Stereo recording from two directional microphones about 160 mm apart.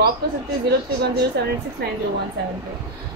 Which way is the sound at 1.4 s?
90° right.